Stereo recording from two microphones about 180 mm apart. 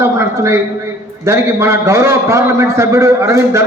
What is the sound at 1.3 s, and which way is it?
A man's voice, 15° right (ahead or behind).